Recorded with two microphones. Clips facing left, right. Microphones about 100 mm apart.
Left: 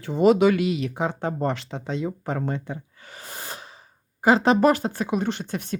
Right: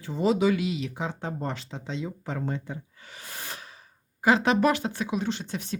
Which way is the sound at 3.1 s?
35° left (ahead or behind).